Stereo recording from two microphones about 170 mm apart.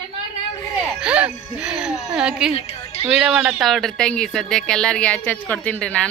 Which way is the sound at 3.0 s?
5° right (ahead or behind).